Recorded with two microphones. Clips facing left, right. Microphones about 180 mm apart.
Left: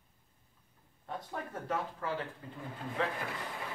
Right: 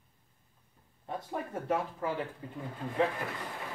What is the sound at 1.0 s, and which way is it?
Speech, 15° right (ahead or behind).